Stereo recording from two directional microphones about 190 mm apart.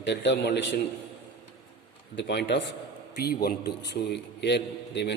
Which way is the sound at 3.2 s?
55° left (ahead or behind).